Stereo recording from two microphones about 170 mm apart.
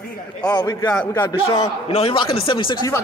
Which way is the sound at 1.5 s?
35° left (ahead or behind).